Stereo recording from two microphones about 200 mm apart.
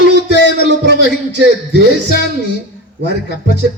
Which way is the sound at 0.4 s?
60° right (ahead or behind).